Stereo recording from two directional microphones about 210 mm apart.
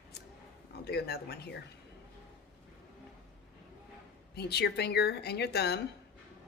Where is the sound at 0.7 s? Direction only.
50° left (ahead or behind).